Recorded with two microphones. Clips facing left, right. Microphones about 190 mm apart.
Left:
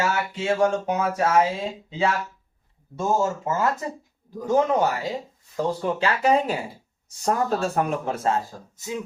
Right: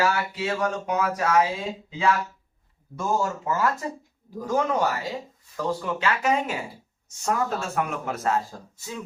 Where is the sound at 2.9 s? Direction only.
25° left (ahead or behind).